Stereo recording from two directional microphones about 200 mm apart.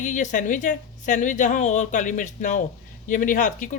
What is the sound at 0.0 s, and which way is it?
Speech, 40° left (ahead or behind).